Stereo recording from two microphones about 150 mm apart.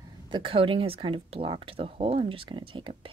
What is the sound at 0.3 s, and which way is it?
Speech, 35° right (ahead or behind).